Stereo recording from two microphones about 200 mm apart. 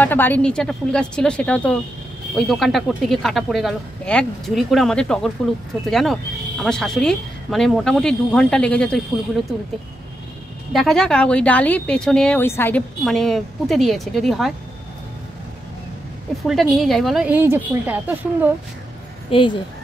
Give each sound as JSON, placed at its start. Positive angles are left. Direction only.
{"t": 0.0, "sound": "speech", "side_deg": 10}
{"t": 10.7, "sound": "speech", "side_deg": 0}
{"t": 16.4, "sound": "speech", "side_deg": 0}
{"t": 19.3, "sound": "speech", "side_deg": 25}